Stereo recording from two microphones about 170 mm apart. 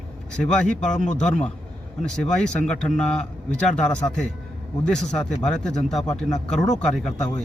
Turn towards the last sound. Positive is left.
turn(degrees=5)  # may be behind; listen again after turning